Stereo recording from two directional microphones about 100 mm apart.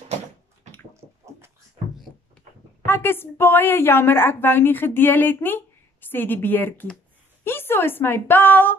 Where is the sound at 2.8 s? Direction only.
20° left (ahead or behind).